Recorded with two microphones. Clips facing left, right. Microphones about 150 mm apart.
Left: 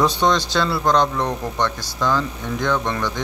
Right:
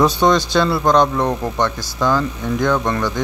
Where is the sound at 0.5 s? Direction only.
15° right (ahead or behind).